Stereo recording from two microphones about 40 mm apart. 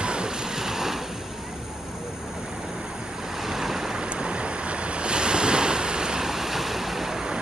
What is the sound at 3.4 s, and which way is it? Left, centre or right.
Waves, centre.